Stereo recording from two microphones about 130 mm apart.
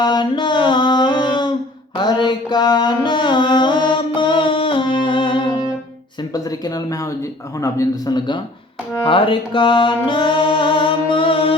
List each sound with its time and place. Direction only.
0.0 s a sound: 35° left (ahead or behind)
2.0 s music: 35° left (ahead or behind)
6.3 s speech: 30° left (ahead or behind)
7.6 s music: 25° left (ahead or behind)
9.0 s music: 45° left (ahead or behind)